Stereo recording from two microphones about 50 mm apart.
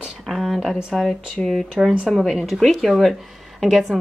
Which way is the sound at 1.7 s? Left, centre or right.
Centre.